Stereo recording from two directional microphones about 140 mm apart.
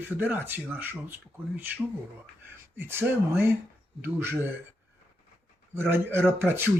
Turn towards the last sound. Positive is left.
turn(degrees=-15)  # may be behind; listen again after turning